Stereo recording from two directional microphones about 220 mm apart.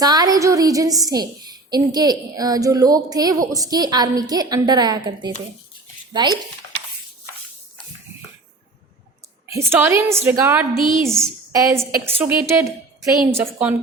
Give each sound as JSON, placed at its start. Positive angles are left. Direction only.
{"t": 0.0, "sound": "a woman's voice", "side_deg": -15}
{"t": 9.5, "sound": "a woman's voice", "side_deg": -10}